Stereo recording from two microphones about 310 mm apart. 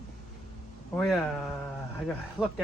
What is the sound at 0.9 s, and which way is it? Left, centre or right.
Speech, centre.